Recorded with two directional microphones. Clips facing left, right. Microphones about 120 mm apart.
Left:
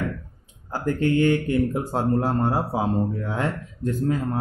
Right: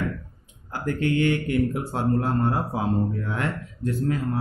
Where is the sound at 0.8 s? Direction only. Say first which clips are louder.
Left 3 dB; 35° left (ahead or behind).